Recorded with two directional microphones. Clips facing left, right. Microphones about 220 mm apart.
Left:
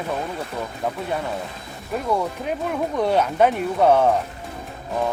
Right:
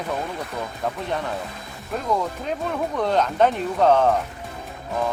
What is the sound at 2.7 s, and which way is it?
Speech, 10° left (ahead or behind).